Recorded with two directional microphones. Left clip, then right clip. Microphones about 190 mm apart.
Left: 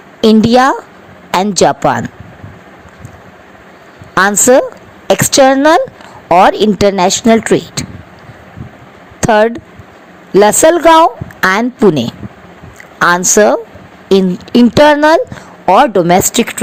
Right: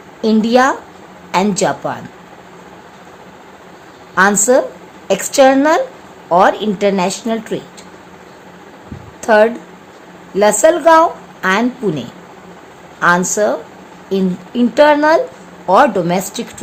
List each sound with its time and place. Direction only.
0.2 s a woman's voice: 40° left (ahead or behind)
4.1 s a woman's voice: 45° left (ahead or behind)
9.2 s a woman's voice: 45° left (ahead or behind)